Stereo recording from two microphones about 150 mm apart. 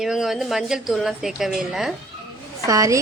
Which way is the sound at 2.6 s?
20° right (ahead or behind).